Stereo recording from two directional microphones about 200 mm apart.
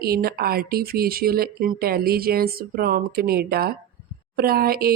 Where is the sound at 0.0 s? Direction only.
50° right (ahead or behind).